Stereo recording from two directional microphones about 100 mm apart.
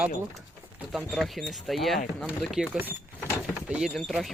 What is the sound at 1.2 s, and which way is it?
Speech, centre (ahead or behind).